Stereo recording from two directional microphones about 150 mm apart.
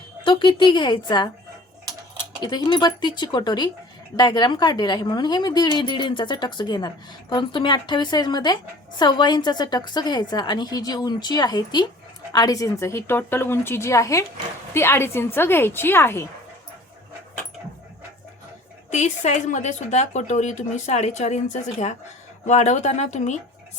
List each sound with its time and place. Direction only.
0.3 s a woman's voice: 30° left (ahead or behind)
2.4 s a woman's voice: 30° left (ahead or behind); by 16.2 s 15° left (ahead or behind)
18.9 s speech: 50° left (ahead or behind)